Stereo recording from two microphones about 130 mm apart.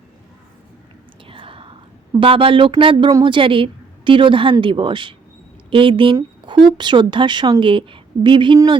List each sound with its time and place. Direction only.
1.3 s whispering: 45° right (ahead or behind)
2.1 s a woman's voice: 45° right (ahead or behind)
6.1 s a sound: 35° right (ahead or behind)
6.7 s a woman's voice: 35° right (ahead or behind)